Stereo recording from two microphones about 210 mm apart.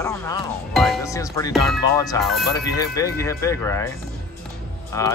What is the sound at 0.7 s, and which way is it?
Music, centre (ahead or behind).